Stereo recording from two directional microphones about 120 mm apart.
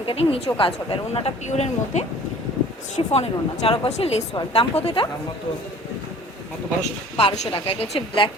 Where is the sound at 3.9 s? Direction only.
65° left (ahead or behind).